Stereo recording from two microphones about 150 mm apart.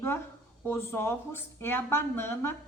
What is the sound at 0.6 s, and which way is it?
Speech, 15° left (ahead or behind).